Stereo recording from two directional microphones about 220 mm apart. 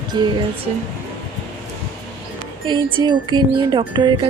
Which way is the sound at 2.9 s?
20° right (ahead or behind).